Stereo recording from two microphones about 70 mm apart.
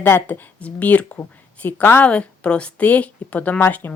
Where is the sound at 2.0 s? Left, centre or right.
Centre.